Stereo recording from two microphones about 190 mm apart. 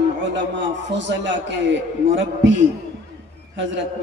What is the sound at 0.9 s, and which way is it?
A man's voice, 70° right (ahead or behind).